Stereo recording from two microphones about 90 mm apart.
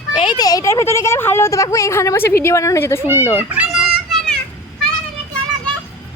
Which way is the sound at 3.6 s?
5° right (ahead or behind).